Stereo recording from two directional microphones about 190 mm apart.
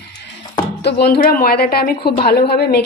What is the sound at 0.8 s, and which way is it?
A woman's voice, 60° left (ahead or behind).